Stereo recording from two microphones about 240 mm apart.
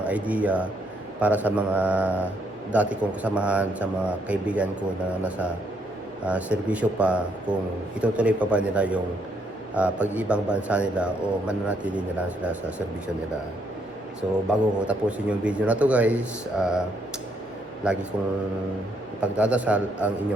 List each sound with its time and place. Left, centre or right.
0.0 s a man's voice: centre
6.2 s a man's voice: centre
14.5 s a man's voice: centre
17.8 s a man's voice: centre
19.2 s a man's voice: centre